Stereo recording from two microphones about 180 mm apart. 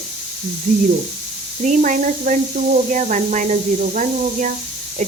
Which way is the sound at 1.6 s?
45° right (ahead or behind).